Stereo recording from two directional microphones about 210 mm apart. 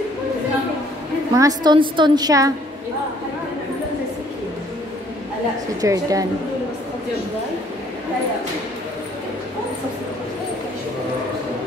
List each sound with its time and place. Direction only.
1.3 s a woman's voice: 15° right (ahead or behind)
5.8 s a woman's voice: 15° right (ahead or behind)